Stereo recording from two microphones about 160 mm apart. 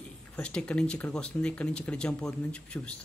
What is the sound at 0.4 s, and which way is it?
Speech, 5° left (ahead or behind).